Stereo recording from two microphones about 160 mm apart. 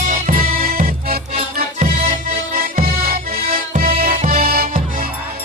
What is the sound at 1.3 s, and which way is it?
Music, 45° right (ahead or behind).